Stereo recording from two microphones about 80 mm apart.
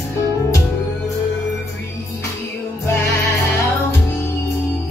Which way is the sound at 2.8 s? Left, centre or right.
Left.